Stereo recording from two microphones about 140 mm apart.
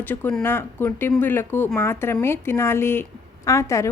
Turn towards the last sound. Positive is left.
turn(degrees=20)  # may be behind; listen again after turning